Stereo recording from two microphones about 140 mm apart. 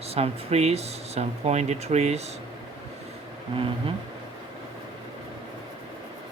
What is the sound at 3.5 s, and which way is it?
Speech, 40° right (ahead or behind).